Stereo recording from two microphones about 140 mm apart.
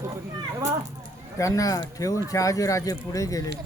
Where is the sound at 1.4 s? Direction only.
25° left (ahead or behind).